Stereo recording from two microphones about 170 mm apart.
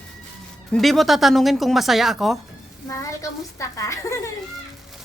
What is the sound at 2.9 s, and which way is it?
A woman's voice, 20° left (ahead or behind).